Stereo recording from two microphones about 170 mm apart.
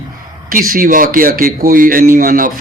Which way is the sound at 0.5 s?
55° right (ahead or behind).